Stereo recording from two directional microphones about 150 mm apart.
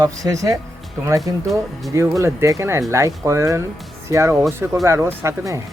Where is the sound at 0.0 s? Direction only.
25° right (ahead or behind).